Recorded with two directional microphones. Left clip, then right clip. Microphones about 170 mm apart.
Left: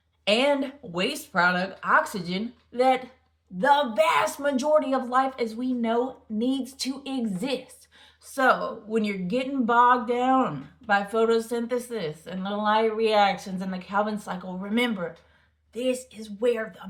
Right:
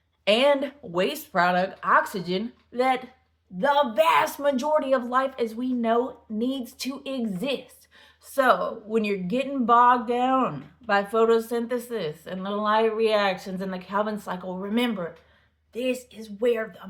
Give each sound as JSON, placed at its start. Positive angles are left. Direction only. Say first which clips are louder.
{"t": 0.3, "sound": "speech", "louder": "right 2 dB", "side_deg": -30}